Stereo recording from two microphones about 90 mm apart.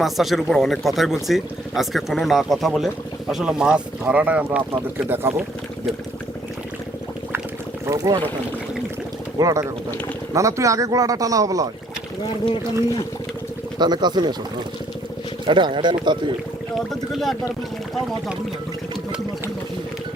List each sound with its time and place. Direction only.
0.0 s speech: centre (ahead or behind); by 5.3 s 25° right (ahead or behind)
7.9 s speech: 40° right (ahead or behind)
9.4 s speech: 40° right (ahead or behind)
13.7 s speech: 50° right (ahead or behind)
15.4 s speech: 60° right (ahead or behind)
16.7 s speech: 5° left (ahead or behind)